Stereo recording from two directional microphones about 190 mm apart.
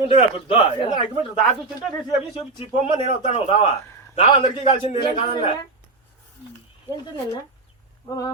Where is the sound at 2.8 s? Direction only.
35° left (ahead or behind).